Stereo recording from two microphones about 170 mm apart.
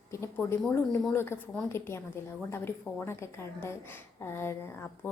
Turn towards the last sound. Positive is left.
turn(degrees=15)  # may be behind; listen again after turning